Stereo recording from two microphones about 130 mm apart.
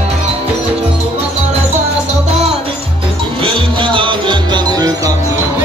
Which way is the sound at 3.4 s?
40° right (ahead or behind).